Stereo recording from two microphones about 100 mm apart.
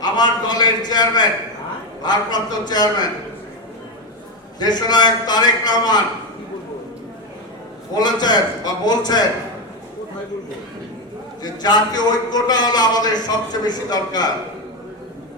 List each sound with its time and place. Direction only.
0.0 s a man's voice: 45° left (ahead or behind)
4.6 s a man's voice: 45° left (ahead or behind)
7.9 s a man's voice: 45° left (ahead or behind)
11.4 s a man's voice: 40° left (ahead or behind)